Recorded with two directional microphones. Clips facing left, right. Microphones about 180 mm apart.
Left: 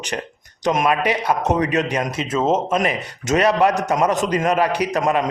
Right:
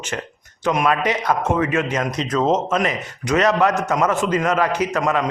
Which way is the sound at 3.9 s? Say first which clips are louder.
Even; 20° left (ahead or behind).